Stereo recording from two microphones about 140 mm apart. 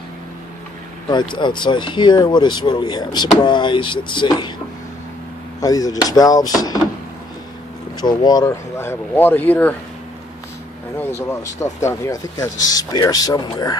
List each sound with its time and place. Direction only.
1.1 s speech: 35° left (ahead or behind)
5.6 s speech: 25° left (ahead or behind)
8.0 s speech: 30° left (ahead or behind)
8.7 s speech: 15° left (ahead or behind)
11.0 s speech: 15° left (ahead or behind)